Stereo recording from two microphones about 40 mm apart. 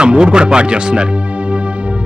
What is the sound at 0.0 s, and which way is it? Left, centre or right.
Speech, right.